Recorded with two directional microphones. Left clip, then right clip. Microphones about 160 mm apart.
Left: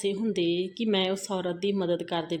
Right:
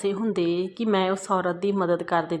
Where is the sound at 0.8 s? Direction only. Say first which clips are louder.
Right 5 dB; centre (ahead or behind).